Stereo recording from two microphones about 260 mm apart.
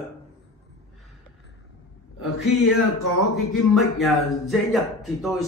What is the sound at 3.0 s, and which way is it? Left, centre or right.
Speech, left.